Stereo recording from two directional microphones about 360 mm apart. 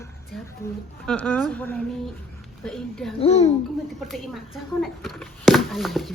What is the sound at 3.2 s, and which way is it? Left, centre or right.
Speech, centre.